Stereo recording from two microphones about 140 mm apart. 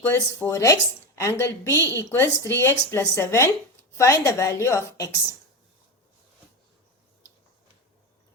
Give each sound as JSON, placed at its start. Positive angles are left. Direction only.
{"t": 0.1, "sound": "a woman's voice", "side_deg": 20}